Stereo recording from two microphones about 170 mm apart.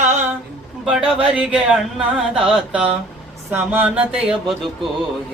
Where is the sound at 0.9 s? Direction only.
5° right (ahead or behind).